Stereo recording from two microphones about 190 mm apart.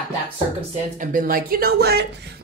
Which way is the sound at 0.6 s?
45° right (ahead or behind).